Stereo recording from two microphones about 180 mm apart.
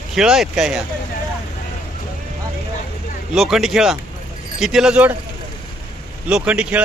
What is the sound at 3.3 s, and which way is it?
Speech, centre (ahead or behind).